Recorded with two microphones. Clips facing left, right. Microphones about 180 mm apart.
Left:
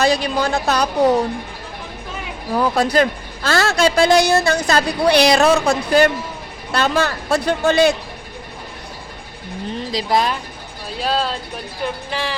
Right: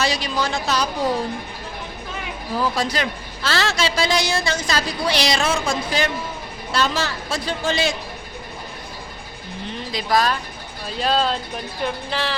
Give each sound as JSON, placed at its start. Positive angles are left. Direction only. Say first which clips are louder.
{"t": 0.0, "sound": "a man's voice", "louder": "left 5 dB", "side_deg": 55}
{"t": 2.6, "sound": "a man's voice", "louder": "left 7 dB", "side_deg": 55}
{"t": 9.7, "sound": "speech", "louder": "left 2 dB", "side_deg": 35}
{"t": 11.0, "sound": "speech", "louder": "right 1 dB", "side_deg": 5}